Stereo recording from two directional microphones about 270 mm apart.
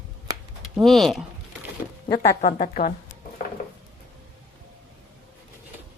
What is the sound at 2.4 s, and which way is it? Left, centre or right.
Speech, left.